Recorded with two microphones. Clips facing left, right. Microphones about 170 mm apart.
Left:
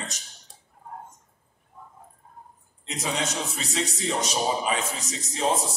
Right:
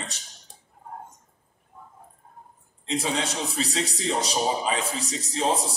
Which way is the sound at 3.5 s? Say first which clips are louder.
Right 2 dB; 35° right (ahead or behind).